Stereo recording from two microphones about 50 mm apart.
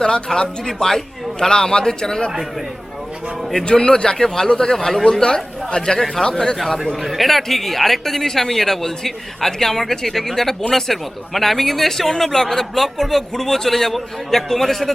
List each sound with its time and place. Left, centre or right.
0.0 s a man's voice: centre
3.5 s a man's voice: centre
6.8 s speech: centre